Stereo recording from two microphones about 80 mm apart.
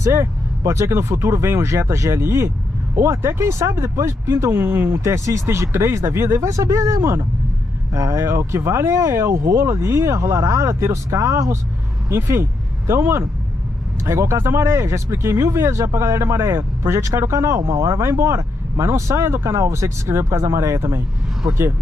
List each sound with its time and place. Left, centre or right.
0.0 s speech: right